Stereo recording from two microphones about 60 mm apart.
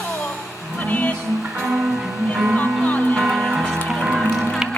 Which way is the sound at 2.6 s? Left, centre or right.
Left.